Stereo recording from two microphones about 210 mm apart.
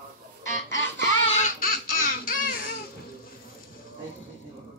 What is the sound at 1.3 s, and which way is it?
Baby laughter, 40° left (ahead or behind).